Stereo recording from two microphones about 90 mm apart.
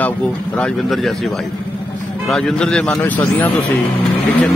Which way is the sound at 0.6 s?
5° left (ahead or behind).